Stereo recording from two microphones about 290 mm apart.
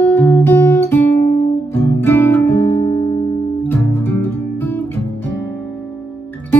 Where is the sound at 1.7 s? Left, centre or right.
Centre.